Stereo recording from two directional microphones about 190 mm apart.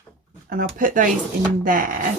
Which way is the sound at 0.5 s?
45° right (ahead or behind).